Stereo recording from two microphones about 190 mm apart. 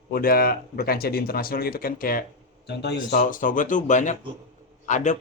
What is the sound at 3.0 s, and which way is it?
A man's voice, 45° left (ahead or behind).